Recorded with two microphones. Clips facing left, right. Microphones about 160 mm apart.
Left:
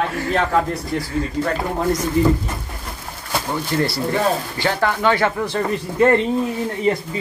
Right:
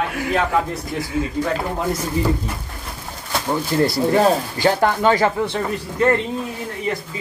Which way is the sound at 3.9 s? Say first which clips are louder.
Right 4 dB; 45° right (ahead or behind).